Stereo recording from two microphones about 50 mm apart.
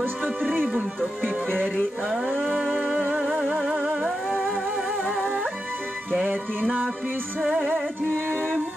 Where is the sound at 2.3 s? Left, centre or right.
Centre.